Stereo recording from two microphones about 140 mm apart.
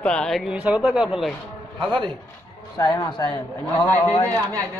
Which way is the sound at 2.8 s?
30° left (ahead or behind).